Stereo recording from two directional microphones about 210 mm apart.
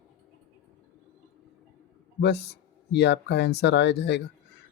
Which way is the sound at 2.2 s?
50° left (ahead or behind).